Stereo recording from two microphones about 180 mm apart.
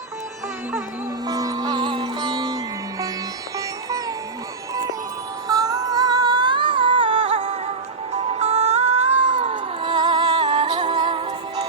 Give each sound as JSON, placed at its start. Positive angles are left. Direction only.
{"t": 1.3, "sound": "music", "side_deg": -20}
{"t": 5.5, "sound": "music", "side_deg": -20}